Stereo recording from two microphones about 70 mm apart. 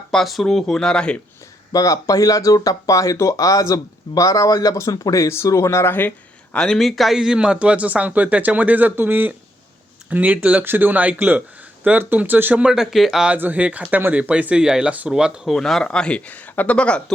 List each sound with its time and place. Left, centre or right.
0.1 s speech: centre
1.7 s speech: left
5.5 s speech: left
6.6 s a man's voice: centre; by 12.6 s right
12.6 s speech: centre
13.3 s a man's voice: right
15.4 s speech: centre